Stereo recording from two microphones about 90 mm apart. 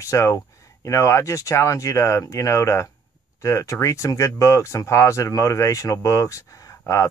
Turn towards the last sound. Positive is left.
turn(degrees=35)  # may be behind; listen again after turning